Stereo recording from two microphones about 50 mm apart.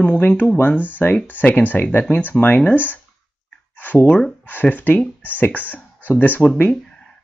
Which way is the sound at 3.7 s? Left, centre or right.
Left.